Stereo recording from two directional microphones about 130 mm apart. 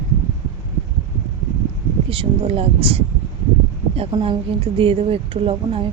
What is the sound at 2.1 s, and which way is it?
Speech, 45° right (ahead or behind).